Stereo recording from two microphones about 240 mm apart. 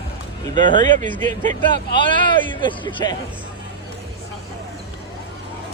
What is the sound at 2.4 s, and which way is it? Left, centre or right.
Speech, centre.